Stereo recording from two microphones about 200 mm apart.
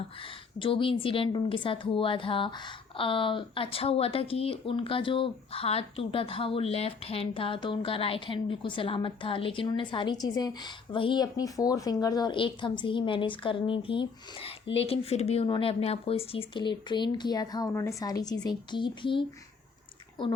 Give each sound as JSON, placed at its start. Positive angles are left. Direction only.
{"t": 0.6, "sound": "speech", "side_deg": 25}